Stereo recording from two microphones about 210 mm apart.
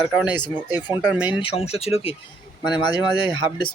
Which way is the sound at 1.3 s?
25° left (ahead or behind).